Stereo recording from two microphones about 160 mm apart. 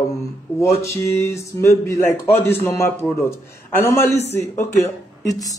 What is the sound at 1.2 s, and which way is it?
A man's voice, 15° left (ahead or behind).